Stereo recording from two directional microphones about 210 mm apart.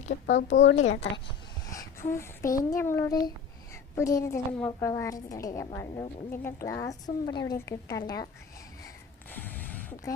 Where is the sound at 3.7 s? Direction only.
15° left (ahead or behind).